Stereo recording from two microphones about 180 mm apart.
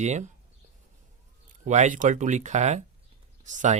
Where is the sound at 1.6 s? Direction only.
45° right (ahead or behind).